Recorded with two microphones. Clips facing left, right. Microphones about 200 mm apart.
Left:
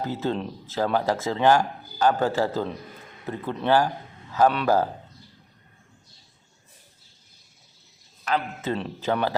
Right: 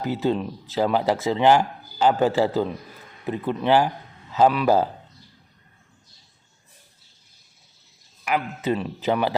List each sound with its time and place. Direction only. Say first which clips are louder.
0.0 s a man's voice: right 4 dB; 15° right (ahead or behind)
8.3 s a man's voice: right 3 dB; 10° right (ahead or behind)